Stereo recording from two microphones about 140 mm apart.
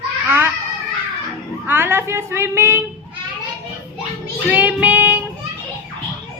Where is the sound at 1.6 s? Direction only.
15° right (ahead or behind).